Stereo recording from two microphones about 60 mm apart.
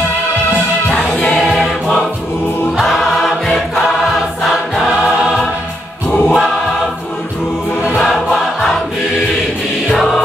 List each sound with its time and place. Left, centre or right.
0.8 s music: centre
1.2 s music: centre
2.8 s choir: centre
4.5 s choir: centre
6.2 s choir: centre
7.9 s choir: centre
9.8 s music: centre